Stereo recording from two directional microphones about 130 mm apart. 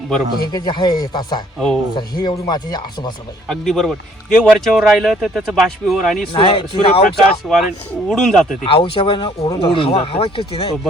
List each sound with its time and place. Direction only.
0.5 s speech: 35° left (ahead or behind)
1.5 s speech: 5° left (ahead or behind)
2.0 s speech: 35° left (ahead or behind)
3.5 s speech: centre (ahead or behind)
6.3 s speech: 45° left (ahead or behind)
7.5 s speech: centre (ahead or behind)
8.6 s speech: 45° left (ahead or behind)